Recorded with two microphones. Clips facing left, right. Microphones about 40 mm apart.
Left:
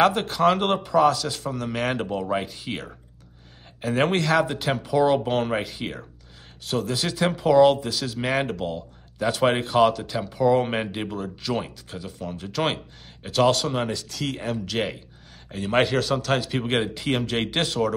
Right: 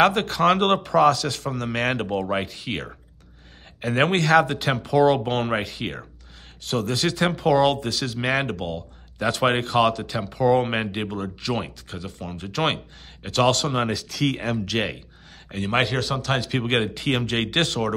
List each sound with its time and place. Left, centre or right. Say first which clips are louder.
0.0 s speech: right 1 dB; right
4.2 s speech: right 4 dB; right
4.9 s speech: right 2 dB; right
14.4 s speech: right 3 dB; right
15.7 s speech: left 2 dB; right